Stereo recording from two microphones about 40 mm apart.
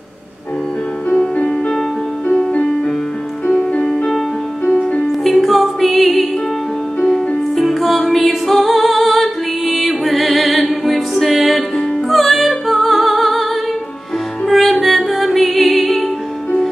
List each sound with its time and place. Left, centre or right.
1.3 s music: left
3.7 s music: centre
5.2 s music: centre